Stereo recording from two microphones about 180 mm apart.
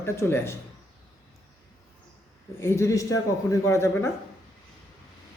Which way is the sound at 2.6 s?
15° left (ahead or behind).